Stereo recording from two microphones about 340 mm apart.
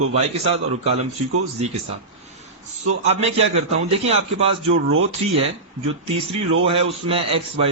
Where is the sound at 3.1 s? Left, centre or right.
Centre.